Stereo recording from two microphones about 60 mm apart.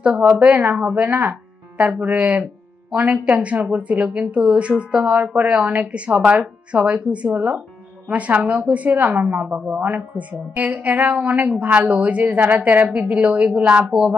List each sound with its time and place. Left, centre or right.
0.0 s a woman's voice: right